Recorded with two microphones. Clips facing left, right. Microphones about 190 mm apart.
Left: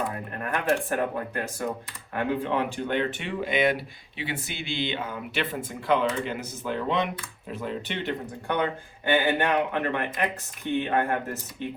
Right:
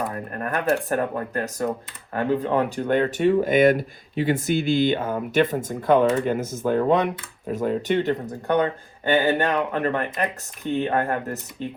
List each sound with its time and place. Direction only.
0.3 s speech: 40° right (ahead or behind)